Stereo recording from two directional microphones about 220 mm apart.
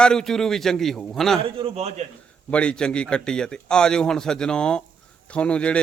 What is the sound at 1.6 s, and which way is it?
Speech, 30° right (ahead or behind).